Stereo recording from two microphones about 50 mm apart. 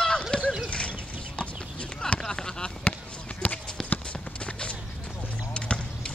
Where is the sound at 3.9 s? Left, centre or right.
Left.